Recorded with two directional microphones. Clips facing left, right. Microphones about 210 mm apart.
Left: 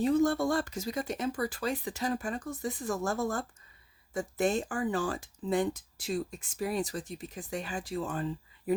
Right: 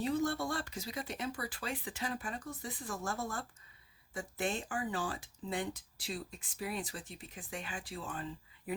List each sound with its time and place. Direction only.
0.0 s speech: 45° left (ahead or behind)